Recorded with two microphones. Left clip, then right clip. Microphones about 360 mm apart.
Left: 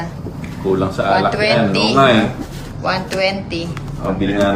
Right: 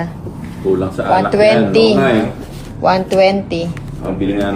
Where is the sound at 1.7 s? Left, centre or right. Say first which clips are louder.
Right 1 dB; centre.